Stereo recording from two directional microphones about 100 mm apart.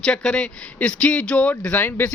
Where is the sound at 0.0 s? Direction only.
10° left (ahead or behind).